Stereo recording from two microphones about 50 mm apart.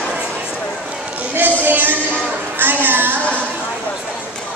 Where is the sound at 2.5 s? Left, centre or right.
Right.